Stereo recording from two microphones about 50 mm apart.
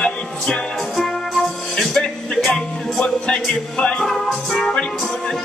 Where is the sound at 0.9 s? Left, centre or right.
Centre.